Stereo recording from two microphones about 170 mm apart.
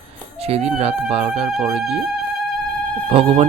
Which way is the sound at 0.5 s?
35° right (ahead or behind).